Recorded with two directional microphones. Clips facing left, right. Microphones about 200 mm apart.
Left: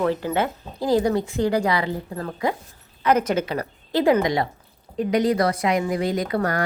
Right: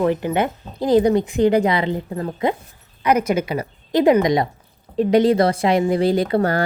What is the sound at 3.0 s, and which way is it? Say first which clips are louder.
A woman's voice: right 2 dB; 10° right (ahead or behind).